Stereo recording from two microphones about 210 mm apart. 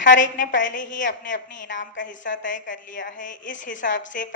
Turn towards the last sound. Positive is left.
turn(degrees=45)  # may be behind; listen again after turning